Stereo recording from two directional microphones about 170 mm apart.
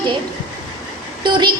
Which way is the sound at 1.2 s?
25° right (ahead or behind).